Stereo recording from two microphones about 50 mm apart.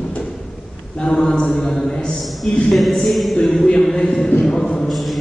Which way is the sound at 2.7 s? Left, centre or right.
Centre.